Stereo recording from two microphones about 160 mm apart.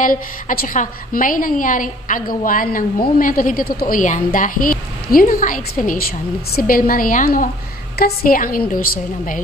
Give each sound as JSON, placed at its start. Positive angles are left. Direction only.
{"t": 0.0, "sound": "a woman's voice", "side_deg": 55}